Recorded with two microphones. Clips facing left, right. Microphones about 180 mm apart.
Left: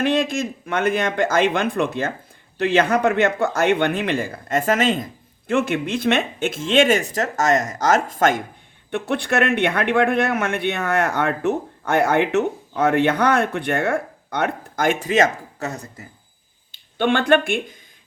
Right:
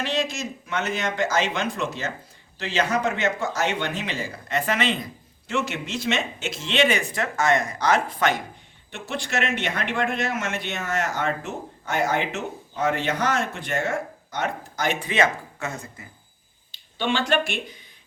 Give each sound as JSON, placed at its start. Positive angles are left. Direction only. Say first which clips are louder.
{"t": 0.0, "sound": "speech", "louder": "left 7 dB", "side_deg": 55}
{"t": 8.9, "sound": "speech", "louder": "left 8 dB", "side_deg": 60}
{"t": 16.7, "sound": "speech", "louder": "left 6 dB", "side_deg": 55}